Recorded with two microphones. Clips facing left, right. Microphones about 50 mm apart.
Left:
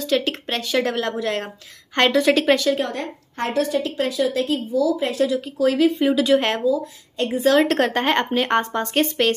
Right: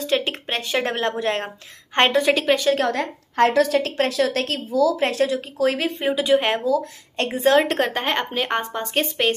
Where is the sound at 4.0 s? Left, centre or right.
Right.